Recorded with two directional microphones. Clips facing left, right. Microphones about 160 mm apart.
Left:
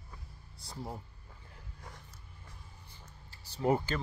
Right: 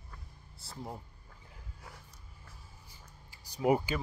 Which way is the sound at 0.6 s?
Centre (ahead or behind).